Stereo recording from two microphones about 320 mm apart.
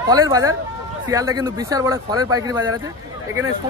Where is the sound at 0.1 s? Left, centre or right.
Centre.